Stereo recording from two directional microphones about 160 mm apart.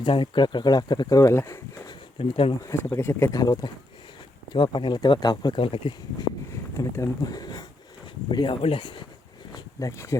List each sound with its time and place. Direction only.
0.0 s speech: 30° left (ahead or behind)
2.1 s speech: 35° left (ahead or behind)
2.6 s speech: 20° left (ahead or behind); by 5.9 s 35° left (ahead or behind)
6.7 s speech: 20° left (ahead or behind)
9.6 s a sound: 20° left (ahead or behind)